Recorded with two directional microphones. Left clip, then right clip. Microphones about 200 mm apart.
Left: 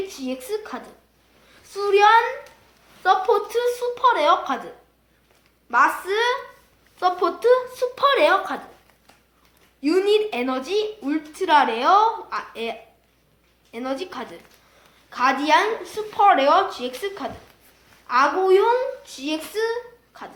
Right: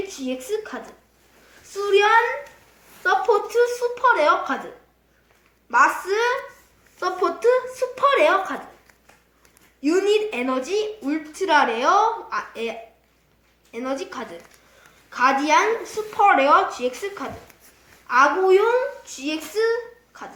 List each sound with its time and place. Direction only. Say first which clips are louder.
0.1 s a woman's voice: right 1 dB; 20° left (ahead or behind)
3.0 s a woman's voice: left 1 dB; 35° left (ahead or behind)
5.7 s a woman's voice: right 1 dB; 25° left (ahead or behind)
9.8 s a woman's voice: even; 30° left (ahead or behind)